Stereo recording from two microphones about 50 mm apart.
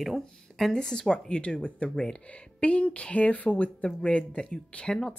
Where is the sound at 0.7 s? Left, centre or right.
Centre; by 3.9 s left.